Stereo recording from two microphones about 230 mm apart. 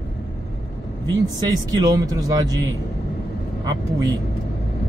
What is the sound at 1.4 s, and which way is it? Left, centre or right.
Speech, centre.